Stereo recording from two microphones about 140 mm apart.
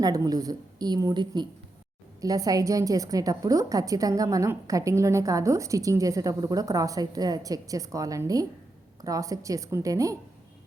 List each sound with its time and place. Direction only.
0.0 s a woman's voice: 25° right (ahead or behind)